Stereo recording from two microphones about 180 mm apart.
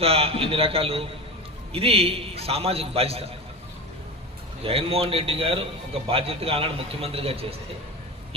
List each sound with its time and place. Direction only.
0.0 s a man's voice: 35° right (ahead or behind)
4.6 s a man's voice: 30° right (ahead or behind)